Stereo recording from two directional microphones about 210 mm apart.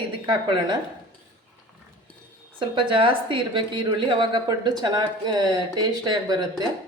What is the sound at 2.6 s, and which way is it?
A woman's voice, 25° right (ahead or behind).